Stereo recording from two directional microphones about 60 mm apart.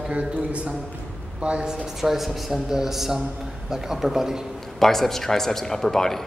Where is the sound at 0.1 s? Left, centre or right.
Right.